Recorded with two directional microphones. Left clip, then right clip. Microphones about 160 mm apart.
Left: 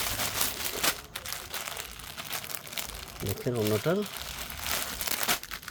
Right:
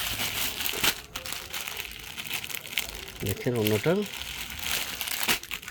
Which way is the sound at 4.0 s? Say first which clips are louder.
Right 2 dB; centre (ahead or behind).